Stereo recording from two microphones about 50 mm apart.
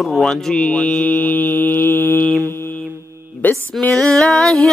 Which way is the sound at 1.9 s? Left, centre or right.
Left.